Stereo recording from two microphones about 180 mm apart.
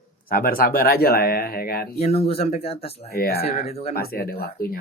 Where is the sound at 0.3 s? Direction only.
55° left (ahead or behind).